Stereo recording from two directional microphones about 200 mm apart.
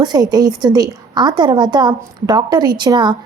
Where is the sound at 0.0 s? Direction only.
20° right (ahead or behind).